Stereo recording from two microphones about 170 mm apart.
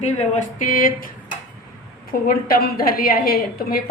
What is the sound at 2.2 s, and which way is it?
A woman's voice, 60° left (ahead or behind).